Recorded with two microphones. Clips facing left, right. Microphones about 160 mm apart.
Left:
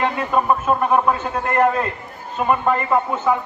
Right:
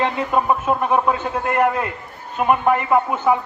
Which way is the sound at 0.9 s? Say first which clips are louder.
Left 1 dB; 5° right (ahead or behind).